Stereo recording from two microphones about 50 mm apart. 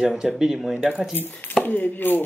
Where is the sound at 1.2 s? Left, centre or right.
Left.